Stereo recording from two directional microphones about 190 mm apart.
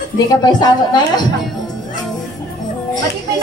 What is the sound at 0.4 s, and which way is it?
Speech, 20° left (ahead or behind).